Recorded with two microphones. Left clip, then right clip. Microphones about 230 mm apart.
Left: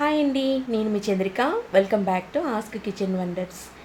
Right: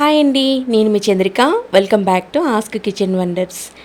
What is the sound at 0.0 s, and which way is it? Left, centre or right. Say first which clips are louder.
A woman's voice: right 10 dB; right.